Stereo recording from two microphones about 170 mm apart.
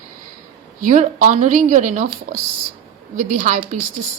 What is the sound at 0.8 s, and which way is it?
Speech, 50° right (ahead or behind).